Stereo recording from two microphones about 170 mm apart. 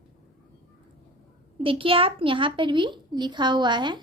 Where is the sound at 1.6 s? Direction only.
30° right (ahead or behind).